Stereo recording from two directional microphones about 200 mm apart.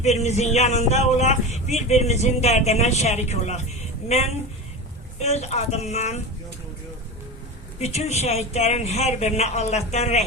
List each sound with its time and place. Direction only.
0.0 s speech: 35° left (ahead or behind)
7.8 s speech: 35° left (ahead or behind)